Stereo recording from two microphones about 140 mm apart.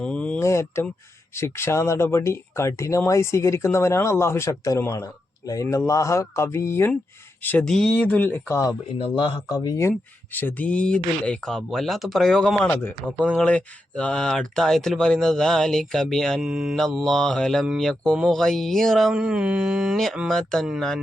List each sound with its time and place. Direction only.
0.0 s a sound: 10° left (ahead or behind)
0.4 s speech: 20° left (ahead or behind)
9.0 s speech: 35° left (ahead or behind); by 21.0 s centre (ahead or behind)